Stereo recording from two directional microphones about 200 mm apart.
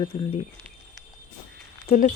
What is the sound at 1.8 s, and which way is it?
Speech, 40° left (ahead or behind).